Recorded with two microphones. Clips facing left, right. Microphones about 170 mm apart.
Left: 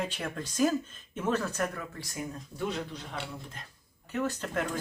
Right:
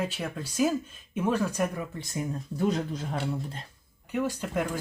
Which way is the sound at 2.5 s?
40° right (ahead or behind).